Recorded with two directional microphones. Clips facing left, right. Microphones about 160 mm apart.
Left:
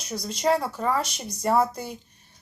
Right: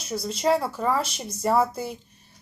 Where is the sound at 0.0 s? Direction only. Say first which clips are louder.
Right 1 dB; 5° right (ahead or behind).